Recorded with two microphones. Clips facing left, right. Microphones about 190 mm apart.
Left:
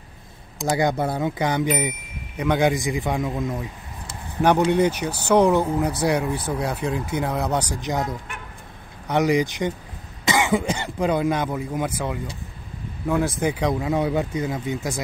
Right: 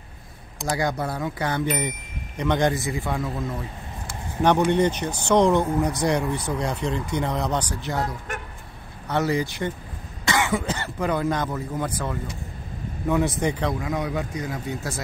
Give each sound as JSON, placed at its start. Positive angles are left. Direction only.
{"t": 0.7, "sound": "speech", "side_deg": 25}
{"t": 4.6, "sound": "speech", "side_deg": 10}
{"t": 13.1, "sound": "speech", "side_deg": 0}
{"t": 13.7, "sound": "speech", "side_deg": 25}